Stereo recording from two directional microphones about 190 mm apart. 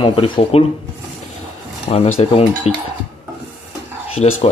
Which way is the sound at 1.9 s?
35° left (ahead or behind).